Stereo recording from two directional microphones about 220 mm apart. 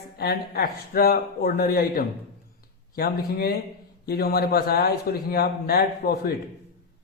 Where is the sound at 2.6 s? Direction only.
45° left (ahead or behind).